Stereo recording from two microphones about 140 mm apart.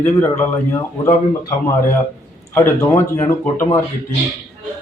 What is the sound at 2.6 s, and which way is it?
A man's voice, 20° left (ahead or behind).